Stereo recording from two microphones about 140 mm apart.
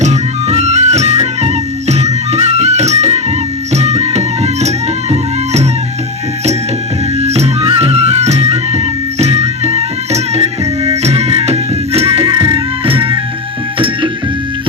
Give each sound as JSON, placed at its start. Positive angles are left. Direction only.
{"t": 0.0, "sound": "music", "side_deg": -50}
{"t": 7.2, "sound": "music", "side_deg": -50}